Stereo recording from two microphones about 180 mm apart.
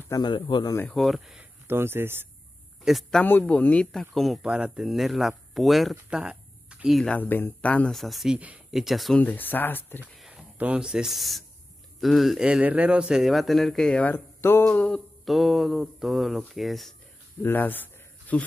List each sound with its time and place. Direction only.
0.1 s speech: 25° left (ahead or behind)
0.8 s speech: centre (ahead or behind)
2.8 s a man's voice: centre (ahead or behind)
10.1 s a man's voice: 5° right (ahead or behind)
17.4 s a sound: 10° left (ahead or behind)